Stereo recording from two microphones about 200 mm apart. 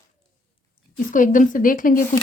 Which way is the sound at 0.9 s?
40° left (ahead or behind).